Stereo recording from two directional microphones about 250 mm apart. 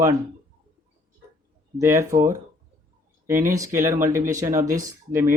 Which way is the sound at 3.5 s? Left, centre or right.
Centre.